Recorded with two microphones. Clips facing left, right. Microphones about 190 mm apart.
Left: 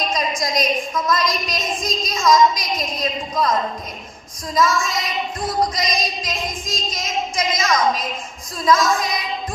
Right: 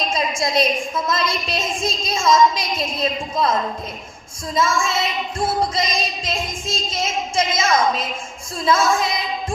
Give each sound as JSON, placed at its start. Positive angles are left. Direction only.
{"t": 0.1, "sound": "child singing", "side_deg": -30}
{"t": 4.5, "sound": "child singing", "side_deg": -30}